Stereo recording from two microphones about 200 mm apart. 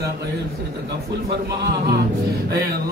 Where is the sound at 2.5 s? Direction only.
50° right (ahead or behind).